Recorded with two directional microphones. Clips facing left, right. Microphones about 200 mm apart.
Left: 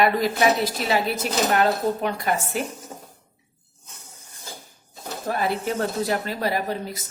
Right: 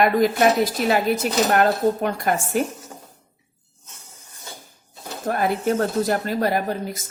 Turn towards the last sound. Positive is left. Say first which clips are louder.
# right 3 dB
turn(degrees=-50)  # may be behind; listen again after turning